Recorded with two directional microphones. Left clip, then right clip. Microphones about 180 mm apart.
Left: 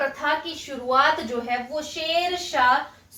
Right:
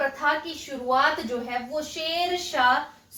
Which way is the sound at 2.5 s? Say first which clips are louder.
Left 2 dB; centre (ahead or behind).